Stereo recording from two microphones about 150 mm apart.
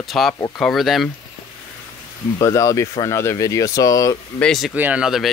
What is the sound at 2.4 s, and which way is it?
Speech, 20° left (ahead or behind).